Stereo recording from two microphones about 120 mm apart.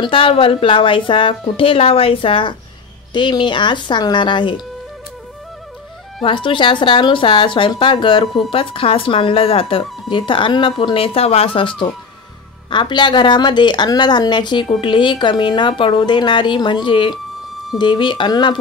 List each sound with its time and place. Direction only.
0.0 s speech: 45° left (ahead or behind)
6.2 s speech: 45° left (ahead or behind)